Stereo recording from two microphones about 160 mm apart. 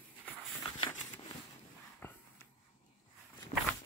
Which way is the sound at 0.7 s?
30° left (ahead or behind).